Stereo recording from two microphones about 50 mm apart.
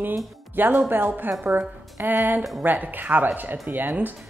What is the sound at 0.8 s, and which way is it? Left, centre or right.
A woman's voice, right.